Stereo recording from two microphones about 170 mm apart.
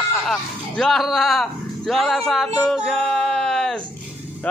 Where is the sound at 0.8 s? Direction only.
Centre (ahead or behind).